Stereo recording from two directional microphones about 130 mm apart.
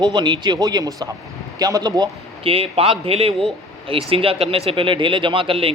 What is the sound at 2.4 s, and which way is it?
A man's voice, 45° right (ahead or behind).